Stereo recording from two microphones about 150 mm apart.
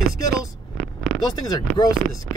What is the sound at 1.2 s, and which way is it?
Speech, 25° left (ahead or behind).